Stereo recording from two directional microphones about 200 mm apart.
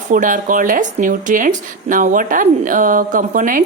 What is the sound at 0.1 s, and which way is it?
Speech, 40° right (ahead or behind).